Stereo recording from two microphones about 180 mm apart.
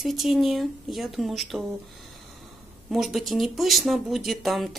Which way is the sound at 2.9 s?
Centre (ahead or behind).